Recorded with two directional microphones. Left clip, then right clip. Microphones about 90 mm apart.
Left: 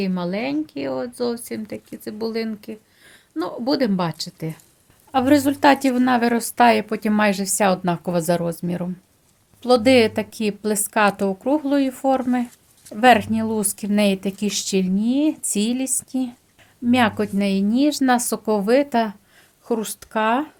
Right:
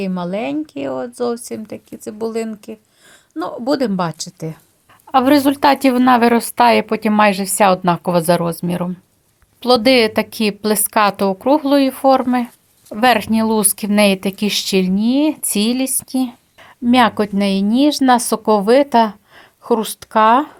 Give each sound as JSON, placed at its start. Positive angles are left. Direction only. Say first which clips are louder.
{"t": 0.2, "sound": "speech", "louder": "right 3 dB", "side_deg": -25}
{"t": 5.1, "sound": "speech", "louder": "right 5 dB", "side_deg": -45}
{"t": 12.9, "sound": "speech", "louder": "right 1 dB", "side_deg": -50}
{"t": 16.9, "sound": "speech", "louder": "right 6 dB", "side_deg": -55}